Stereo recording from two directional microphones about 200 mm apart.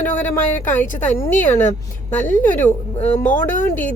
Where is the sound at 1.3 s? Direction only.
40° left (ahead or behind).